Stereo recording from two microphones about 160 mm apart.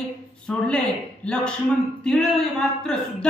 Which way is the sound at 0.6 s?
5° left (ahead or behind).